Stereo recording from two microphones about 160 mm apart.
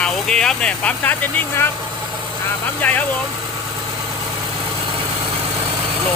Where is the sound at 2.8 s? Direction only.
10° left (ahead or behind).